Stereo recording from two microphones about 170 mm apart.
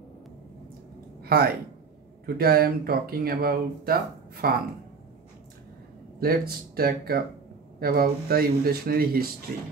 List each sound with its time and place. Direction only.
1.2 s a sound: 65° right (ahead or behind)
2.2 s speech: 65° right (ahead or behind)
6.1 s speech: 65° right (ahead or behind)